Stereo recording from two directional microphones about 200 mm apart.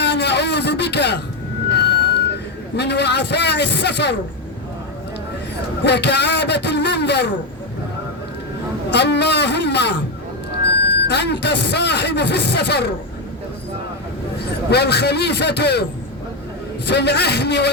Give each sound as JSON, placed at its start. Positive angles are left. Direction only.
{"t": 0.0, "sound": "a sound", "side_deg": 60}
{"t": 2.7, "sound": "speech", "side_deg": 55}
{"t": 5.8, "sound": "a man's voice", "side_deg": 60}
{"t": 8.9, "sound": "speech", "side_deg": 60}
{"t": 11.1, "sound": "speech", "side_deg": 55}
{"t": 14.7, "sound": "speech", "side_deg": 55}